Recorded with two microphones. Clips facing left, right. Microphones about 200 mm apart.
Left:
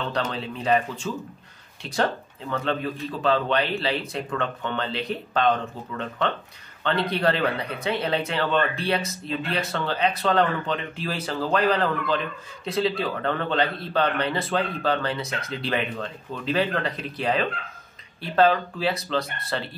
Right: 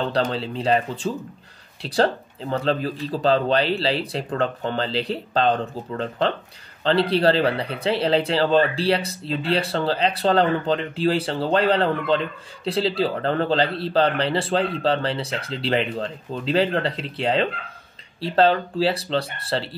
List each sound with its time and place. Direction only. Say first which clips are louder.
0.1 s a man's voice: right 5 dB; 35° right (ahead or behind)